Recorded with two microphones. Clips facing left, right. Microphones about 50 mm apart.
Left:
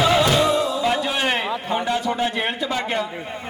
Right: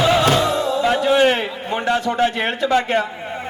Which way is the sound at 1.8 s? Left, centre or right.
Right.